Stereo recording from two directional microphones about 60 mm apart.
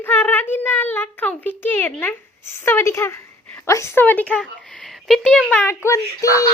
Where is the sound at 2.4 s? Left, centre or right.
Left.